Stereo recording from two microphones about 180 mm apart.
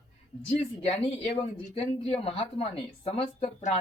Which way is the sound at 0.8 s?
35° left (ahead or behind).